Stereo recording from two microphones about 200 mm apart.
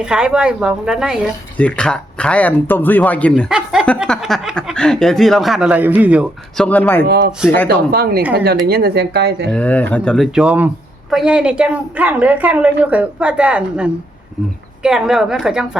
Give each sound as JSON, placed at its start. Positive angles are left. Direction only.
{"t": 0.0, "sound": "speech", "side_deg": -5}
{"t": 6.7, "sound": "speech", "side_deg": 10}
{"t": 7.0, "sound": "speech", "side_deg": -55}
{"t": 9.5, "sound": "a woman's voice", "side_deg": 5}